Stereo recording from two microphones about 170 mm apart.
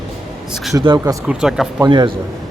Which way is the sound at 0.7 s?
20° right (ahead or behind).